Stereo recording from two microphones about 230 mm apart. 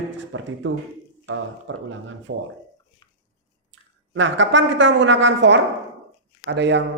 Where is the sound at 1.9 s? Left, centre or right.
Right.